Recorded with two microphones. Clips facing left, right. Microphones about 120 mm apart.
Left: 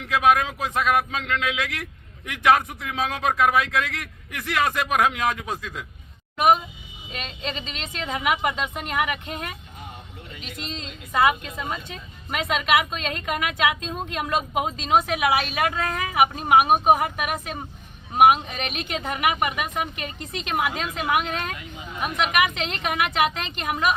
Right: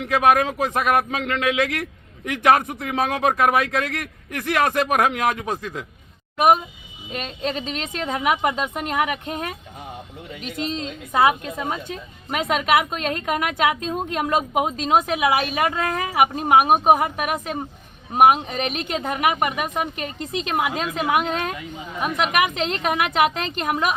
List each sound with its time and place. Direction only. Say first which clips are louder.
0.0 s a man's voice: right 2 dB; 50° right (ahead or behind)
7.1 s a woman's voice: right 6 dB; 45° right (ahead or behind)
10.4 s a man's voice: right 9 dB; 45° right (ahead or behind)
11.1 s a woman's voice: right 2 dB; 30° right (ahead or behind)
12.5 s a woman's voice: right 2 dB; 40° right (ahead or behind)
18.5 s a woman's voice: right 5 dB; 35° right (ahead or behind)